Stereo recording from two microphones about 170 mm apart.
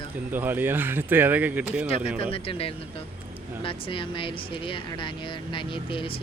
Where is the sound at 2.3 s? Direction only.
35° left (ahead or behind).